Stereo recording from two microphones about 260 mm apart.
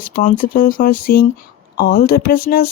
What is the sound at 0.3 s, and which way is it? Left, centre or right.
Speech, left.